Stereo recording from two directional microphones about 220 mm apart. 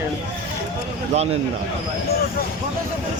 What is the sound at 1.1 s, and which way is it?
Speech, 30° right (ahead or behind).